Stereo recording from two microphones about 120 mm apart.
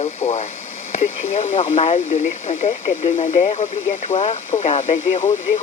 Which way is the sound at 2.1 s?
85° left.